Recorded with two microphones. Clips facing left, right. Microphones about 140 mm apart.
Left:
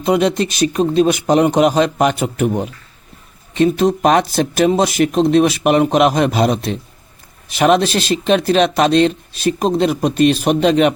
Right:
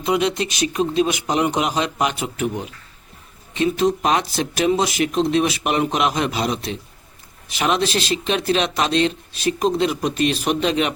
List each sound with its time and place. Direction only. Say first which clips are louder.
0.0 s speech: left 5 dB; 40° left (ahead or behind)